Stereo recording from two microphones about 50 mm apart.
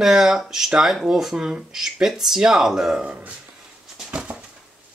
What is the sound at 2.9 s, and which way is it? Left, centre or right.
Speech, centre.